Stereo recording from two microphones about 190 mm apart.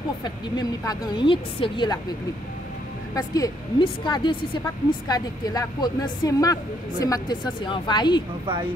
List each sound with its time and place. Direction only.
0.2 s a woman's voice: 20° left (ahead or behind)
3.2 s a woman's voice: 20° left (ahead or behind)